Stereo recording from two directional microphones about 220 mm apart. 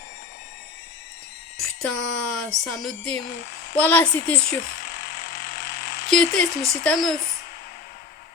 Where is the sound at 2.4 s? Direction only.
Centre (ahead or behind).